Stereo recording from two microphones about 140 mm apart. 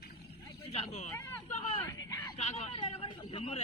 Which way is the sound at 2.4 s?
50° left (ahead or behind).